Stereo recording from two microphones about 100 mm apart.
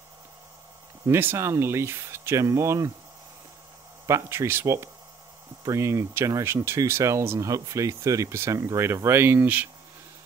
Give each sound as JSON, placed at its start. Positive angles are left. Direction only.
{"t": 1.0, "sound": "speech", "side_deg": -25}
{"t": 4.0, "sound": "speech", "side_deg": -30}